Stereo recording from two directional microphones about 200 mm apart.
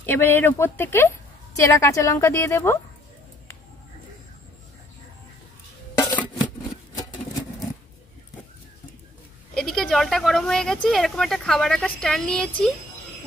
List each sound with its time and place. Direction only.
0.0 s a woman's voice: 10° left (ahead or behind)
7.0 s vehicle: 20° left (ahead or behind)
9.5 s speech: 5° left (ahead or behind)